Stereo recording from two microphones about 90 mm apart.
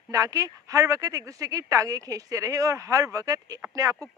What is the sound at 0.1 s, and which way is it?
Speech, 40° right (ahead or behind).